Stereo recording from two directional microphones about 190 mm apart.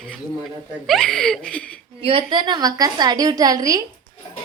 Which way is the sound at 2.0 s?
30° right (ahead or behind).